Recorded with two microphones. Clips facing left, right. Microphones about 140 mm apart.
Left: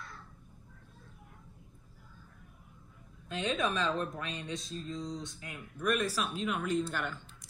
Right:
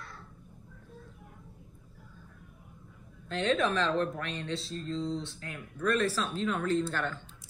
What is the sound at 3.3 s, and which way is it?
Speech, 15° left (ahead or behind).